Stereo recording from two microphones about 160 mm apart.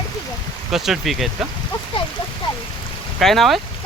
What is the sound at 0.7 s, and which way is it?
Speech, centre (ahead or behind).